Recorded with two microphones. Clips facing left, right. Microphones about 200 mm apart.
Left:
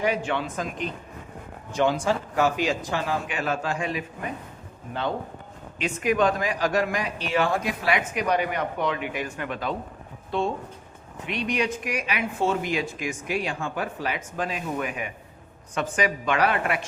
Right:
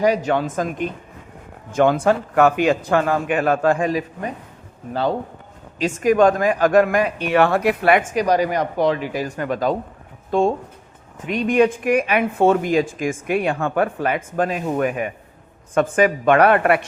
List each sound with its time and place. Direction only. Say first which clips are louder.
0.0 s speech: right 7 dB; 40° right (ahead or behind)
5.8 s speech: right 7 dB; 45° right (ahead or behind); by 8.0 s 60° right (ahead or behind)
8.1 s speech: right 7 dB; 35° right (ahead or behind)
11.3 s speech: right 10 dB; 50° right (ahead or behind)